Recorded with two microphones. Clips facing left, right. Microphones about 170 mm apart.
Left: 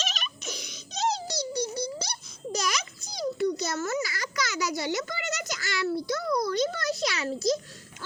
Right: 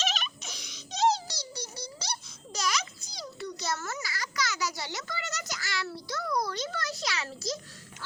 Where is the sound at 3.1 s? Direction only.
50° left (ahead or behind).